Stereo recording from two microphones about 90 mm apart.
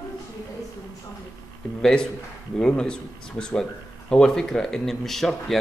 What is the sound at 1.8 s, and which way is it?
Speech, 10° left (ahead or behind).